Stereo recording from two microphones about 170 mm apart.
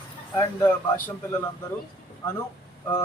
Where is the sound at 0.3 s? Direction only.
10° left (ahead or behind).